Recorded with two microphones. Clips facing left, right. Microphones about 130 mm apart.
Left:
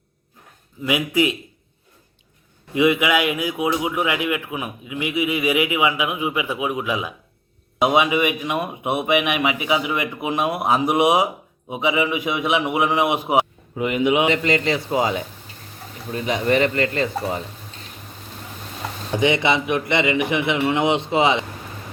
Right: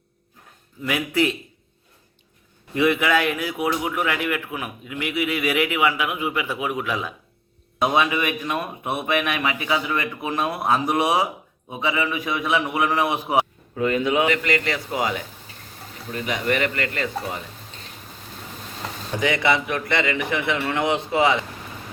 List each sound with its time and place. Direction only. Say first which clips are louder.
0.8 s speech: left 2 dB; 15° left (ahead or behind)
2.7 s speech: left 2 dB; 15° left (ahead or behind)
16.1 s a man's voice: left 4 dB; 30° left (ahead or behind)
19.2 s a man's voice: left 2 dB; 20° left (ahead or behind)